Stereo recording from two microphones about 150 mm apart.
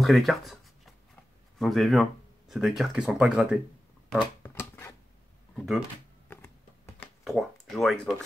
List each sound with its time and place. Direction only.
0.0 s writing: centre (ahead or behind)
1.6 s speech: centre (ahead or behind)
4.4 s a sound: 15° left (ahead or behind)
5.6 s speech: centre (ahead or behind)
6.2 s a sound: 15° left (ahead or behind)
7.2 s speech: centre (ahead or behind)